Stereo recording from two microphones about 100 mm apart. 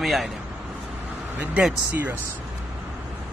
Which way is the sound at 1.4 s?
15° right (ahead or behind).